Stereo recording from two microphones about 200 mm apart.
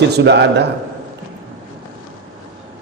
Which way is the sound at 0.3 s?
60° right (ahead or behind).